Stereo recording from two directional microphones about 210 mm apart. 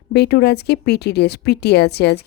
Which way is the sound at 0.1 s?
50° left (ahead or behind).